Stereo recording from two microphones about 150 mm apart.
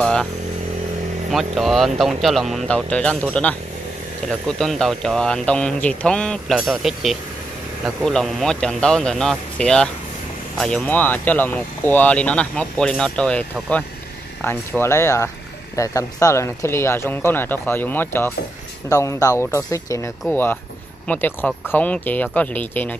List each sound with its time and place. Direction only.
0.0 s motorcycle: 5° left (ahead or behind)
1.3 s speech: centre (ahead or behind)